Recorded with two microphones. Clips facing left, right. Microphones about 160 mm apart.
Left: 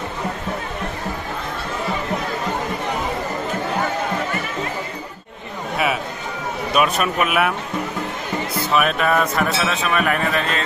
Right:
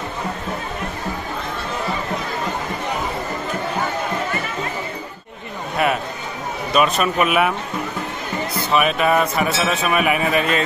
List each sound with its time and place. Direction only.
6.7 s speech: 5° left (ahead or behind)
8.7 s speech: 5° right (ahead or behind)